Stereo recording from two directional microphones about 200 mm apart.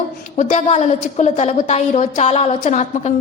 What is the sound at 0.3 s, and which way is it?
A woman's voice, 35° left (ahead or behind).